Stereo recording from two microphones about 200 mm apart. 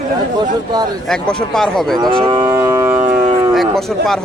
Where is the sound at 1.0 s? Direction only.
5° left (ahead or behind).